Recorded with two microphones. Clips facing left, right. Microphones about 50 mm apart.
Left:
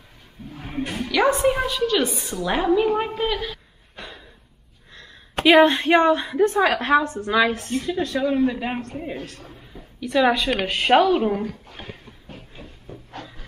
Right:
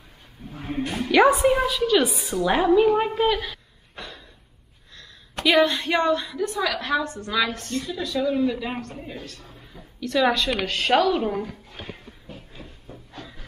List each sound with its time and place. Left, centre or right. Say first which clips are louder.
0.9 s a woman's voice: right 3 dB; centre
1.3 s a woman's voice: right 1 dB; centre
4.9 s a woman's voice: left 6 dB; left
7.8 s a woman's voice: left 1 dB; left
9.5 s a woman's voice: left 2 dB; centre